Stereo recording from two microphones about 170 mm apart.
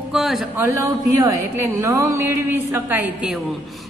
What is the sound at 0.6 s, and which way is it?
A woman's voice, 20° right (ahead or behind).